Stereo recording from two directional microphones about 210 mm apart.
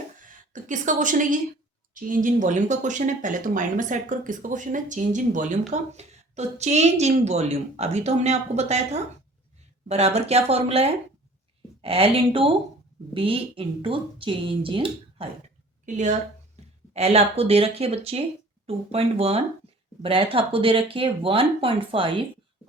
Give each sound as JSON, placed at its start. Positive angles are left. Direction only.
{"t": 0.2, "sound": "a woman's voice", "side_deg": -40}